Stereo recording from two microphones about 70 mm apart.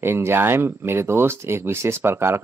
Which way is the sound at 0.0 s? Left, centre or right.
Right.